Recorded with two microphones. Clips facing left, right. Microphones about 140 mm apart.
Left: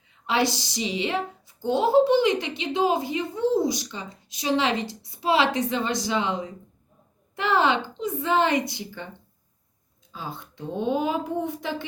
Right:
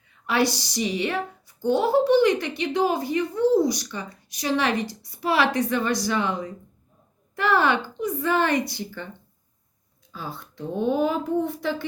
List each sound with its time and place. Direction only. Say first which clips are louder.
0.1 s speech: right 1 dB; 20° left (ahead or behind)
10.1 s a woman's voice: even; 20° left (ahead or behind)